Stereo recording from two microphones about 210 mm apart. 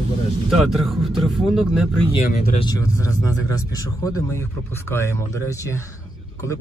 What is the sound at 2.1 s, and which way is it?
Speech, 45° left (ahead or behind).